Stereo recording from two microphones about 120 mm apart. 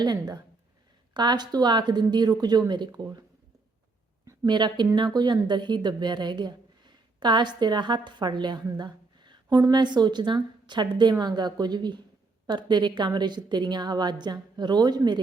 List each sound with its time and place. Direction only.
0.0 s a woman's voice: 35° right (ahead or behind)
4.4 s a woman's voice: 40° right (ahead or behind)